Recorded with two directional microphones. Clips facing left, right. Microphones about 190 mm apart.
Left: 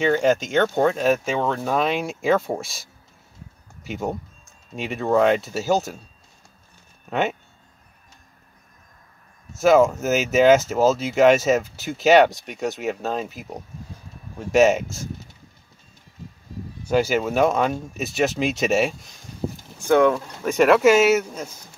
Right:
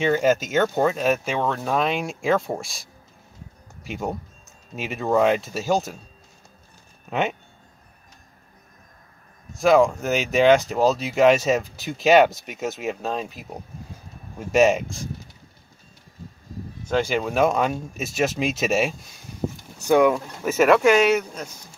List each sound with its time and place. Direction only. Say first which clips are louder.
0.0 s speech: left 1 dB; 5° right (ahead or behind)
7.1 s speech: left 1 dB; centre (ahead or behind)
9.5 s speech: left 1 dB; centre (ahead or behind)
16.8 s speech: left 3 dB; 5° left (ahead or behind)
19.9 s speech: even; 10° right (ahead or behind); by 21.5 s 5° left (ahead or behind)